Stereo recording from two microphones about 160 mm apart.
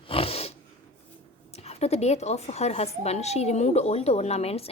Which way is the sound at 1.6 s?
40° left (ahead or behind).